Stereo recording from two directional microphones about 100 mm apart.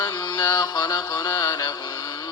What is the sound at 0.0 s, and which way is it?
Music, 45° left (ahead or behind).